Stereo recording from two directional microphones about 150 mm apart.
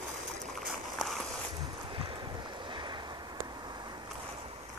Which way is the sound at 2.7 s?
30° right (ahead or behind).